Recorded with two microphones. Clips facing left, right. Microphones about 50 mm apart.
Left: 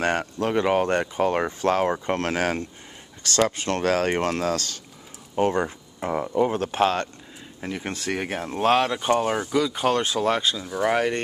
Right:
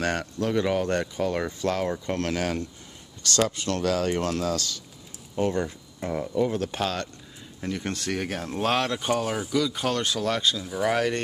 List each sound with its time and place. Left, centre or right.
0.0 s speech: left
7.6 s speech: centre
10.7 s speech: centre